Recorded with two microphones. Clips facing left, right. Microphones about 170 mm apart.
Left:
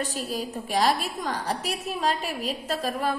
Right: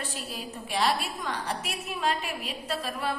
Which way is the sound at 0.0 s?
40° left (ahead or behind).